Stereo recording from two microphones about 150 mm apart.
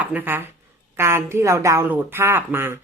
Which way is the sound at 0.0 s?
10° right (ahead or behind).